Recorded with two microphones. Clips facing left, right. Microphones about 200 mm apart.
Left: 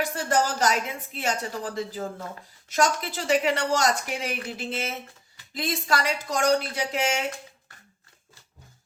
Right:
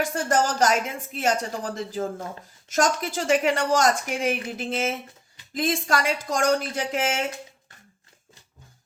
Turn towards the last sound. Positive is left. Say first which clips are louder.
# right 1 dB
turn(degrees=-50)  # may be behind; listen again after turning